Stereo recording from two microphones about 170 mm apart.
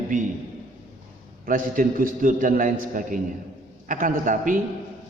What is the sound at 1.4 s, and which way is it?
A man's voice, 55° right (ahead or behind).